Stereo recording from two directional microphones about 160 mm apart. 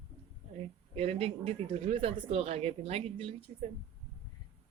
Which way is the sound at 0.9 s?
40° right (ahead or behind).